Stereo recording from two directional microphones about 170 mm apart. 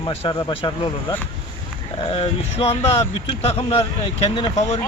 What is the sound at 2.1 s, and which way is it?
Speech, 35° left (ahead or behind).